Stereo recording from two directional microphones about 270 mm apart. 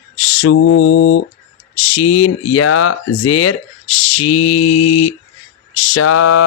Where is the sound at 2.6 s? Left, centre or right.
Left.